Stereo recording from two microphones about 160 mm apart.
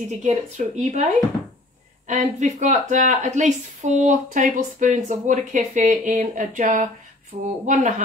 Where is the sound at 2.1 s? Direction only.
50° right (ahead or behind).